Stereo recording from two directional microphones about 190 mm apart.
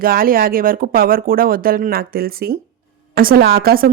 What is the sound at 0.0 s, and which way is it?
A woman's voice, 50° right (ahead or behind).